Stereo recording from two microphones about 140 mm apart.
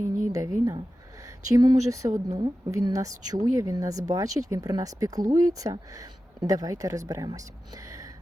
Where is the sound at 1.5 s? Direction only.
30° right (ahead or behind).